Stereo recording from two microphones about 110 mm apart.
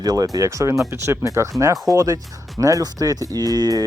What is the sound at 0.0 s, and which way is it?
Speech, 35° right (ahead or behind).